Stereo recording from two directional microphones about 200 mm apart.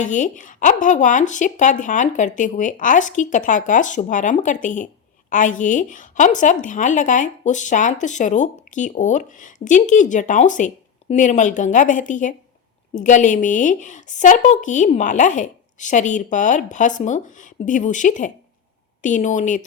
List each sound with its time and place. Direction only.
0.0 s speech: 40° left (ahead or behind)